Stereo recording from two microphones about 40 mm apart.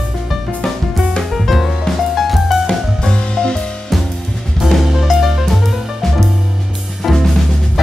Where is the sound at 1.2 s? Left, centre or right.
Centre.